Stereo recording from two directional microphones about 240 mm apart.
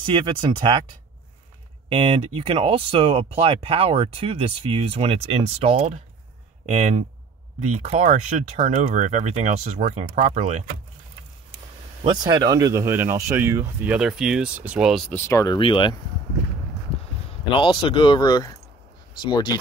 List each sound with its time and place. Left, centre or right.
0.0 s speech: right
1.9 s speech: right
12.1 s speech: centre
15.1 s speech: centre
17.6 s speech: left